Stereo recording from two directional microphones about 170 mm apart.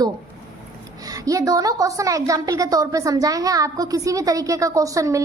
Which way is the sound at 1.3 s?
20° right (ahead or behind).